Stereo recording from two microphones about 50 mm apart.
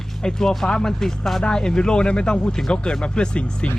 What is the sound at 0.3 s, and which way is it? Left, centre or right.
Speech, centre.